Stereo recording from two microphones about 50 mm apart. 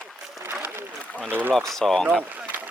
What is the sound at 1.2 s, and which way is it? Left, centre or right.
Speech, right.